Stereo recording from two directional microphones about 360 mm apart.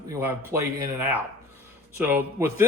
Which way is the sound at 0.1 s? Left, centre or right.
Centre.